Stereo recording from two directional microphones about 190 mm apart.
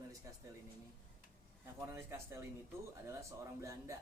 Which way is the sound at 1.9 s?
15° right (ahead or behind).